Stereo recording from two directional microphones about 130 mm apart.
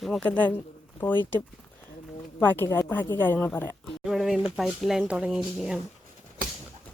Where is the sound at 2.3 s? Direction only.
15° left (ahead or behind).